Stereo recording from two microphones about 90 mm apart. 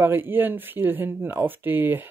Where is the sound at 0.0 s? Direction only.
25° right (ahead or behind).